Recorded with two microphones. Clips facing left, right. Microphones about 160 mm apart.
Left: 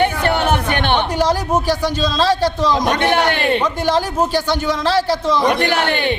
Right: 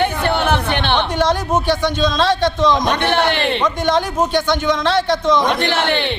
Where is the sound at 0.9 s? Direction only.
10° left (ahead or behind).